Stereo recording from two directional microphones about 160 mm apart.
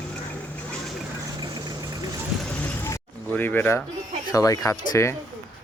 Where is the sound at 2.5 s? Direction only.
10° left (ahead or behind).